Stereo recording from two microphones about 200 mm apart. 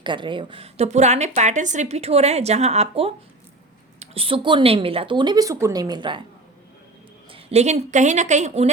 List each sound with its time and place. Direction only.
0.0 s a woman's voice: 25° right (ahead or behind)
7.3 s a woman's voice: 30° right (ahead or behind)